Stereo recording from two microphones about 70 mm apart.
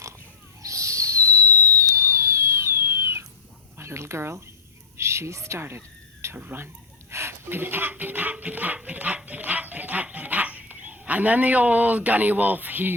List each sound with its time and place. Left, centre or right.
0.6 s owl: right
3.8 s a woman's voice: right